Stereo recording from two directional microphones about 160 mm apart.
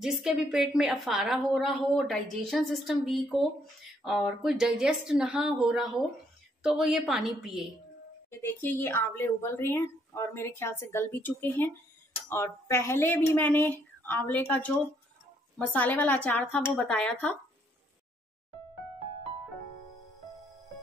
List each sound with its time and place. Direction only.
0.0 s a woman's voice: 5° right (ahead or behind)
8.3 s speech: 15° left (ahead or behind)
15.7 s speech: 10° left (ahead or behind)